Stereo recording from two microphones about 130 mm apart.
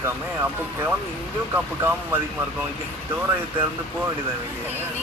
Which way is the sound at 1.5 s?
15° right (ahead or behind).